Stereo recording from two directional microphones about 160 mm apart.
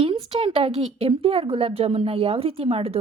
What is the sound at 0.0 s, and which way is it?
Speech, 35° right (ahead or behind).